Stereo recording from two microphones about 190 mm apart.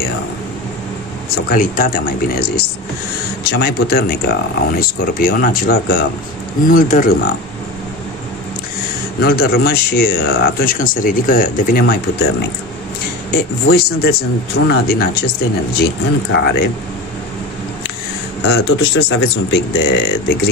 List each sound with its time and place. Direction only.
1.3 s speech: 45° left (ahead or behind)
9.2 s speech: 55° left (ahead or behind)
18.5 s speech: 65° left (ahead or behind)